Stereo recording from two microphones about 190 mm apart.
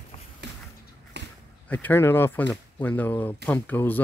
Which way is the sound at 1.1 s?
65° right (ahead or behind).